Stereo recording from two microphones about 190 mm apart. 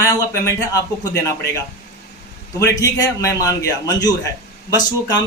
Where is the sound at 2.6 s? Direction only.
20° left (ahead or behind).